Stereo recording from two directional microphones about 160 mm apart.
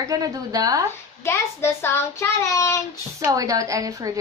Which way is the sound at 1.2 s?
15° left (ahead or behind).